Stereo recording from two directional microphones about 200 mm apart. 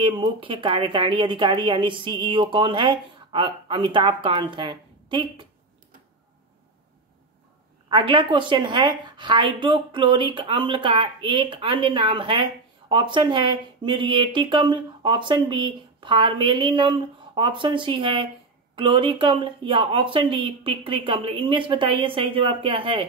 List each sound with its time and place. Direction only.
0.0 s a woman's voice: 25° right (ahead or behind)
7.9 s a woman's voice: 25° right (ahead or behind)